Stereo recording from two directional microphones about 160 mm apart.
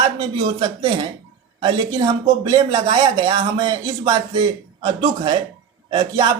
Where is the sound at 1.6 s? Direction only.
25° right (ahead or behind).